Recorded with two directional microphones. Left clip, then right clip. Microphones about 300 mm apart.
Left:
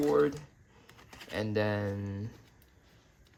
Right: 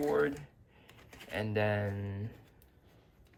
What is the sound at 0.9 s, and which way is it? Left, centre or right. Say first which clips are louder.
Typing: left 2 dB; centre.